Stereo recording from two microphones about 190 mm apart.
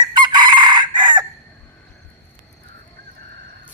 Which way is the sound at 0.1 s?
25° right (ahead or behind).